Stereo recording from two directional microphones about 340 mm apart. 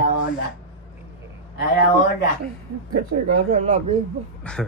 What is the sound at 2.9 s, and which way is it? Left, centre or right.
Speech, right.